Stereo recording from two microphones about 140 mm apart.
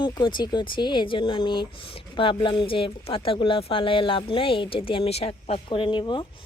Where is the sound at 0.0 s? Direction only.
35° left (ahead or behind).